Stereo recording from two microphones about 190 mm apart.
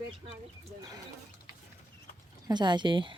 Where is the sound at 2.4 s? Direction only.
25° right (ahead or behind).